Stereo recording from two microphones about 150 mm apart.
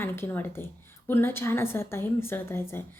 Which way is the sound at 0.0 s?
15° left (ahead or behind).